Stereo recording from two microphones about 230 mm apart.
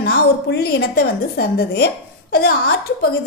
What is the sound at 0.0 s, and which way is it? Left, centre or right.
A woman's voice, left.